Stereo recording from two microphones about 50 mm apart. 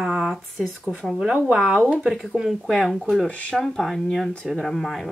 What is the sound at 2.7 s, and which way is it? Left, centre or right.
Speech, centre.